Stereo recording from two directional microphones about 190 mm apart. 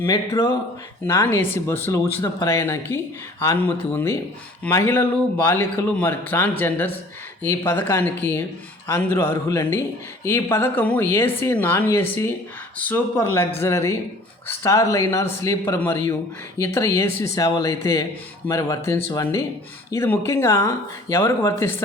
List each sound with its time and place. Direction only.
0.0 s speech: 15° left (ahead or behind)